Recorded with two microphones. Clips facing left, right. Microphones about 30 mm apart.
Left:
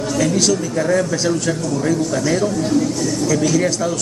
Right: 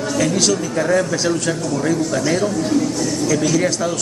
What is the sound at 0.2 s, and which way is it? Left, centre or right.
A man's voice, centre.